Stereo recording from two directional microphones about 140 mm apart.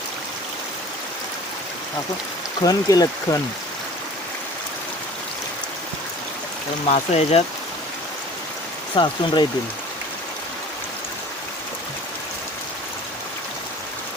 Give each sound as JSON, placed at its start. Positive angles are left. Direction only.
{"t": 2.6, "sound": "speech", "side_deg": 25}
{"t": 6.8, "sound": "speech", "side_deg": 50}
{"t": 9.0, "sound": "speech", "side_deg": 35}